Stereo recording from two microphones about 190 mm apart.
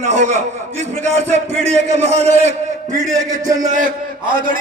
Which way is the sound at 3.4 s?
20° right (ahead or behind).